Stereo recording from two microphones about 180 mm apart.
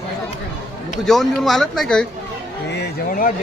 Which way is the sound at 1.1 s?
Centre (ahead or behind).